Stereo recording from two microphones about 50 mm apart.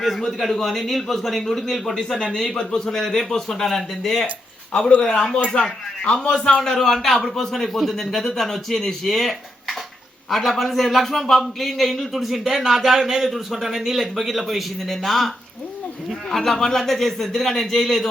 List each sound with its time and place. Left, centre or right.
0.3 s a man's voice: centre
4.7 s a man's voice: centre
16.3 s a man's voice: centre